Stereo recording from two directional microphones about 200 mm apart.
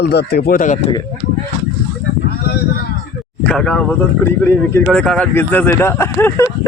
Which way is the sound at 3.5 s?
5° left (ahead or behind).